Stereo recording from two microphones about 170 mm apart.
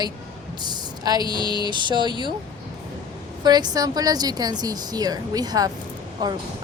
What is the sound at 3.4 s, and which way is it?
A woman's voice, 25° right (ahead or behind).